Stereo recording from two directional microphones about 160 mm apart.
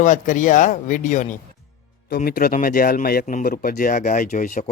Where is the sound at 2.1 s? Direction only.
70° left (ahead or behind).